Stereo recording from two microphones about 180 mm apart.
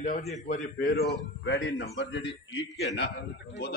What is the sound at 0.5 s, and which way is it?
Speech, 50° left (ahead or behind).